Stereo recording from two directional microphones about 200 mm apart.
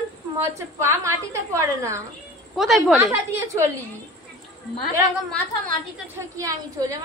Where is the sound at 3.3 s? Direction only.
15° right (ahead or behind).